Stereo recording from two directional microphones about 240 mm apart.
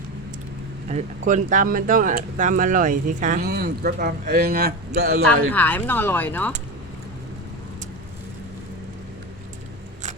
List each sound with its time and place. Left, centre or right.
0.9 s speech: right
5.3 s speech: centre